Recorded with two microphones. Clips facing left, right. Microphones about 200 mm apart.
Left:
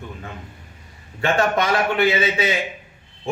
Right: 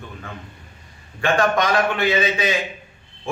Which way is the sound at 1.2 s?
25° left (ahead or behind).